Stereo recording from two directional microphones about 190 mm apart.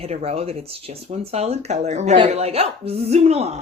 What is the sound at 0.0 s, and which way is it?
Speech, 35° right (ahead or behind).